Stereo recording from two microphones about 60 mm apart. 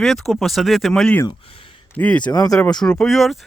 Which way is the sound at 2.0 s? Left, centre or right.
Left.